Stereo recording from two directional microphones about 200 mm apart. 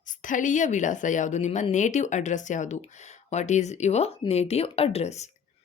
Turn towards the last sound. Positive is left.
turn(degrees=35)  # may be behind; listen again after turning